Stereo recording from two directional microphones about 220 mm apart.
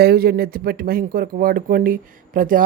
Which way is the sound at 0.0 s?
45° right (ahead or behind).